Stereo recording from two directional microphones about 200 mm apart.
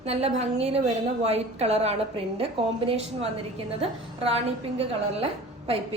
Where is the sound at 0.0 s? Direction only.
30° right (ahead or behind).